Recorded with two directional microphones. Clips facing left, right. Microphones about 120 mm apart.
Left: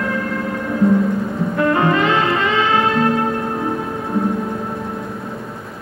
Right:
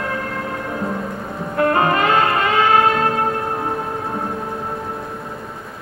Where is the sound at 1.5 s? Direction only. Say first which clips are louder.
Even; 45° right (ahead or behind).